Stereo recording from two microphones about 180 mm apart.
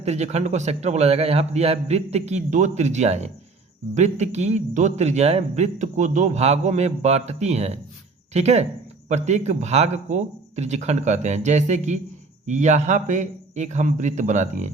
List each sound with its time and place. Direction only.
0.0 s a man's voice: 35° right (ahead or behind)